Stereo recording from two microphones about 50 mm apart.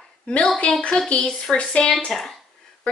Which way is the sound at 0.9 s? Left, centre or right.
Left.